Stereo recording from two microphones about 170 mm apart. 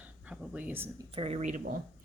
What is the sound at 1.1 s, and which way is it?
Speech, 35° right (ahead or behind).